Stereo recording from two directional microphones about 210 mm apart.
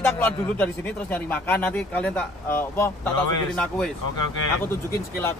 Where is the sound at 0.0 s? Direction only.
10° left (ahead or behind).